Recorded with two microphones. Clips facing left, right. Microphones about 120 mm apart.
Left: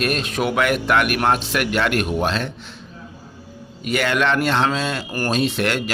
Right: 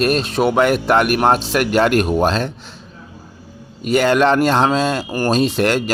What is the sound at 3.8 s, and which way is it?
Speech, 35° right (ahead or behind).